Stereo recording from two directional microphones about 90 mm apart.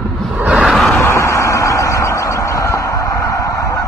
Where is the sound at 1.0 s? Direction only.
30° left (ahead or behind).